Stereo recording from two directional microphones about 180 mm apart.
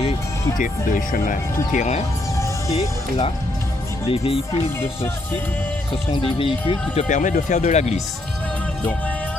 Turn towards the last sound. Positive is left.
turn(degrees=40)  # may be behind; listen again after turning